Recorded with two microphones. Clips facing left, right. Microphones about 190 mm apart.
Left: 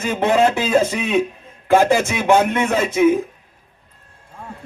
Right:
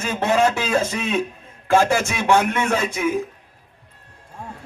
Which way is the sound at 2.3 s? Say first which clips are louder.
Left 3 dB; 20° left (ahead or behind).